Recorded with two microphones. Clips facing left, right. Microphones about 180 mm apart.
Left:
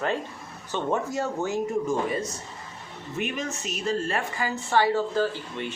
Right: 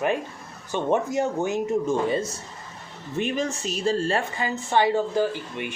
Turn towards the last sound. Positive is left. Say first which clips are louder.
# right 2 dB
turn(degrees=-15)  # may be behind; listen again after turning